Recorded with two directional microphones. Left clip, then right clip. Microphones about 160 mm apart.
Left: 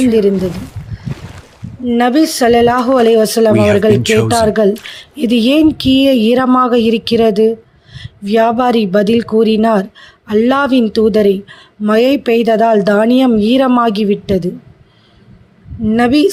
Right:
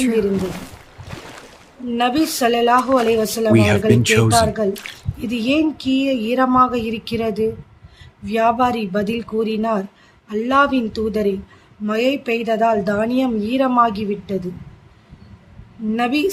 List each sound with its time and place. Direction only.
0.0 s a sound: centre (ahead or behind)
1.9 s speech: 40° left (ahead or behind)
2.9 s speech: centre (ahead or behind)
3.2 s speech: 45° left (ahead or behind)
3.5 s speech: centre (ahead or behind)
5.2 s speech: 50° left (ahead or behind)
15.9 s speech: 45° left (ahead or behind)